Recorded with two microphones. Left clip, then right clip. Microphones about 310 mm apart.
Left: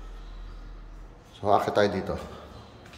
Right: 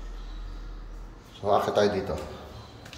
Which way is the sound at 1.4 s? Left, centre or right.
Centre.